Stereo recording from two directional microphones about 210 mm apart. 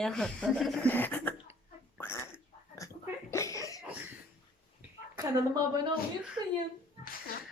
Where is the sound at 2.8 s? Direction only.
15° left (ahead or behind).